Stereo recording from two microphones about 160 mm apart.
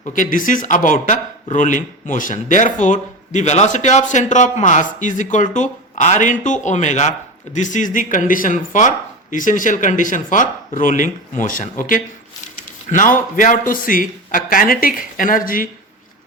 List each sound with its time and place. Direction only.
0.0 s a man's voice: 55° left (ahead or behind)